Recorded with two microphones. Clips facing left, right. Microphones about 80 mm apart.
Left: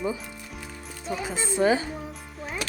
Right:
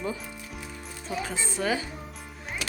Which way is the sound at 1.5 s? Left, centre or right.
Left.